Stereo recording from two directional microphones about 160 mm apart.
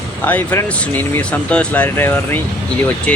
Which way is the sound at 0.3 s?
10° left (ahead or behind).